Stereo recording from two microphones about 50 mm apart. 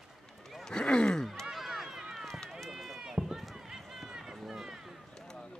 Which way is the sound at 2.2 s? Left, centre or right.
Centre.